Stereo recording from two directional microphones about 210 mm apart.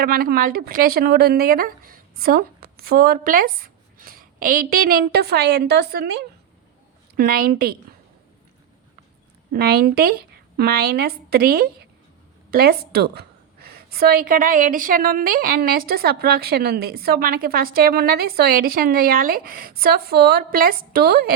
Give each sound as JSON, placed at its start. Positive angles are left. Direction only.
{"t": 0.0, "sound": "a woman's voice", "side_deg": -45}
{"t": 9.5, "sound": "a woman's voice", "side_deg": -45}